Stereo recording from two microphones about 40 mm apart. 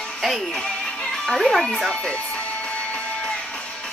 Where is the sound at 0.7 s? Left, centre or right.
Left.